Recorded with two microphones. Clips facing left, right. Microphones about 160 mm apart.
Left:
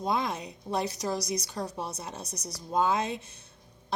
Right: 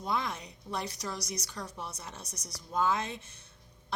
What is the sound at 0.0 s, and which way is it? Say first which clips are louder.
Speech: left 4 dB; 15° left (ahead or behind).